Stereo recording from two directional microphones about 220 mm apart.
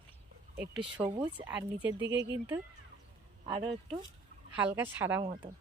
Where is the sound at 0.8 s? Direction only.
20° right (ahead or behind).